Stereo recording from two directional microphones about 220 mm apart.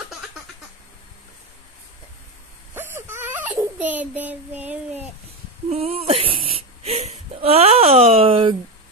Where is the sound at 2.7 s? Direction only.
10° right (ahead or behind).